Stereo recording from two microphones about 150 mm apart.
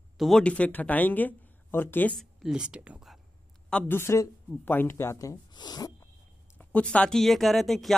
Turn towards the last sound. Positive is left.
turn(degrees=0)  # may be behind; listen again after turning